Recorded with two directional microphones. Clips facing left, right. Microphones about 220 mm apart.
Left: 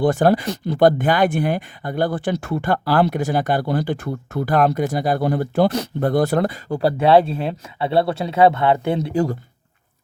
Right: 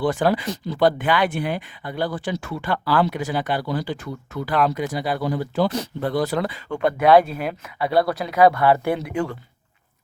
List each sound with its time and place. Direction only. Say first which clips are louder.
0.0 s speech: left 4 dB; 45° left (ahead or behind); by 9.0 s 20° left (ahead or behind)
9.0 s speech: left 5 dB; 40° left (ahead or behind)